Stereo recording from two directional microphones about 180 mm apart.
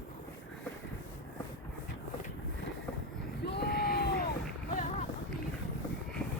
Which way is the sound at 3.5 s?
60° left (ahead or behind).